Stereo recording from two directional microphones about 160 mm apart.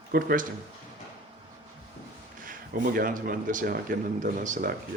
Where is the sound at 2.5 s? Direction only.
60° right (ahead or behind).